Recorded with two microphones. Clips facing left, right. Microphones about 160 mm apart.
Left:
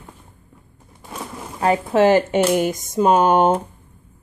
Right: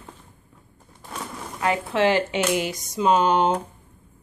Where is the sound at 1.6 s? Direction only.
40° left (ahead or behind).